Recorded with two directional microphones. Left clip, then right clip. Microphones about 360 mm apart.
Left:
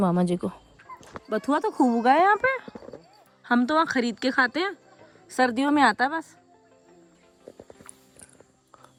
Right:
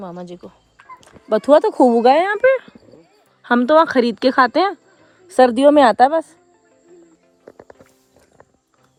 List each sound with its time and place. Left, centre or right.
0.0 s speech: centre
1.6 s a woman's voice: centre